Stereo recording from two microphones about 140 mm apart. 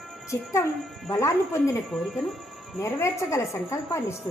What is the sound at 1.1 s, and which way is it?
Speech, 20° left (ahead or behind).